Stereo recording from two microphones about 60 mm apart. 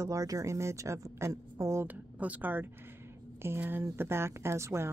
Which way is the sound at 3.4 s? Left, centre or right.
Right.